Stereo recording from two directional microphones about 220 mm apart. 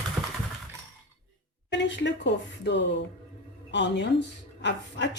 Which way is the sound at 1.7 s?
55° left (ahead or behind).